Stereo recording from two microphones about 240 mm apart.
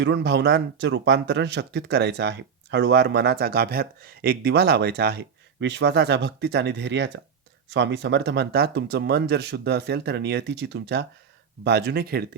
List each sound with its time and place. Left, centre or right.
0.0 s speech: right